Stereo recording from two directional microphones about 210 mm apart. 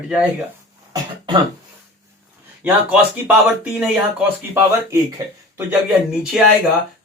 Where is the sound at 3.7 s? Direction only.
5° right (ahead or behind).